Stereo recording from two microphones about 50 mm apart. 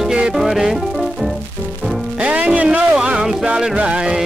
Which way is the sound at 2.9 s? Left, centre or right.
Centre.